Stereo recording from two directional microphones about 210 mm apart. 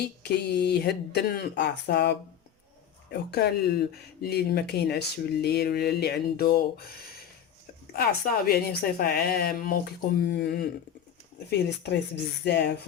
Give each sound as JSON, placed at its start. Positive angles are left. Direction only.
{"t": 0.0, "sound": "speech", "side_deg": 50}
{"t": 7.9, "sound": "speech", "side_deg": 45}
{"t": 11.8, "sound": "speech", "side_deg": 50}